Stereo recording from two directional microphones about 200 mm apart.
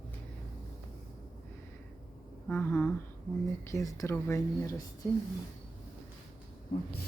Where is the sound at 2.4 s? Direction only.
5° left (ahead or behind).